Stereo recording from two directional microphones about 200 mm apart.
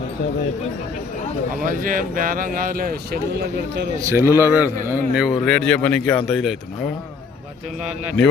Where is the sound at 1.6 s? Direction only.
45° right (ahead or behind).